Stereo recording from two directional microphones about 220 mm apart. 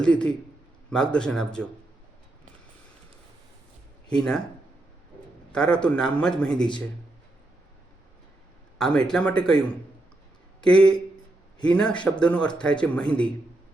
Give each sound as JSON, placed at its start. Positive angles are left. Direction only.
{"t": 0.0, "sound": "speech", "side_deg": 5}
{"t": 4.1, "sound": "speech", "side_deg": 5}
{"t": 5.5, "sound": "speech", "side_deg": 5}
{"t": 8.8, "sound": "speech", "side_deg": 5}
{"t": 10.7, "sound": "speech", "side_deg": 5}